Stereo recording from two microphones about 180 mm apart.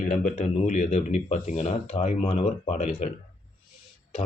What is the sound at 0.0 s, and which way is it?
Speech, 40° left (ahead or behind).